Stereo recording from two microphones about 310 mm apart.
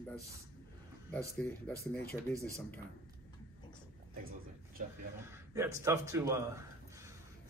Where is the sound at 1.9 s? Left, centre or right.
Left.